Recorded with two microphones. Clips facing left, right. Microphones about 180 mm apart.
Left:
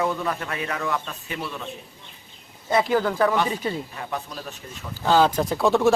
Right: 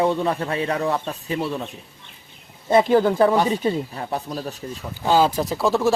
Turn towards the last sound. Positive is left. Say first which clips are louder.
# left 1 dB
turn(degrees=0)  # may be behind; listen again after turning